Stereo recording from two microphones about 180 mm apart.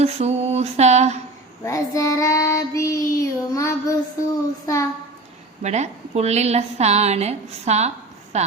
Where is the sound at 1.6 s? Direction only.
15° left (ahead or behind).